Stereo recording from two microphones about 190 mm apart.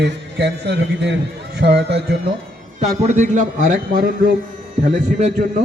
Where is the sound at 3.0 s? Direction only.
40° right (ahead or behind).